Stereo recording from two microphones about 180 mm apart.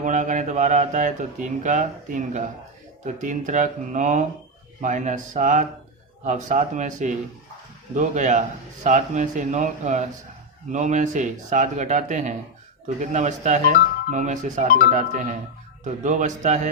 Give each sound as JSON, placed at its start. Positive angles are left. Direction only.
{"t": 0.0, "sound": "speech", "side_deg": -45}